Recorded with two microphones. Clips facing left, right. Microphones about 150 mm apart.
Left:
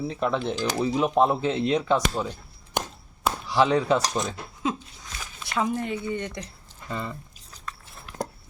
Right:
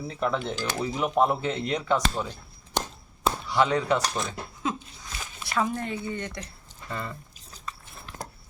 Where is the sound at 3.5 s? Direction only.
5° left (ahead or behind).